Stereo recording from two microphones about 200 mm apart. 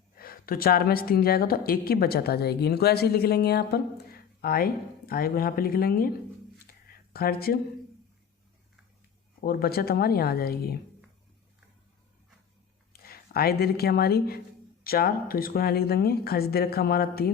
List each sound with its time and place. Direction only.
0.2 s a woman's voice: 45° left (ahead or behind)
6.7 s a sound: 50° left (ahead or behind)
9.4 s a woman's voice: 50° left (ahead or behind)
12.9 s a woman's voice: 50° left (ahead or behind)